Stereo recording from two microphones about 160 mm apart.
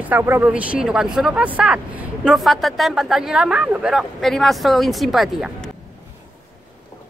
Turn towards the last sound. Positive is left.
turn(degrees=0)  # may be behind; listen again after turning